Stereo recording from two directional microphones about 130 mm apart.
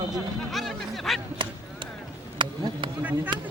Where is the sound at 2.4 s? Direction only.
40° right (ahead or behind).